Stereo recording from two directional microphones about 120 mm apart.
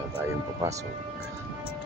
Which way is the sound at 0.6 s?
25° right (ahead or behind).